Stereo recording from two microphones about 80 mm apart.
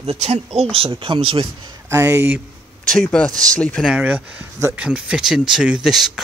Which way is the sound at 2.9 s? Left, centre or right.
Centre.